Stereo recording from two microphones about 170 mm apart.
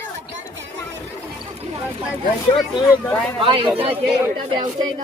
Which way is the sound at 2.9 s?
10° left (ahead or behind).